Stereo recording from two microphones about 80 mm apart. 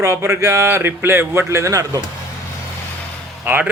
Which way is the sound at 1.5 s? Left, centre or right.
Right.